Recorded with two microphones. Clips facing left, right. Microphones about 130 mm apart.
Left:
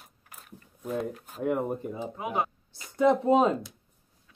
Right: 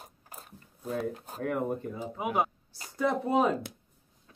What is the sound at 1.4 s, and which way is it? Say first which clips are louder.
Speech: left 3 dB; 20° left (ahead or behind).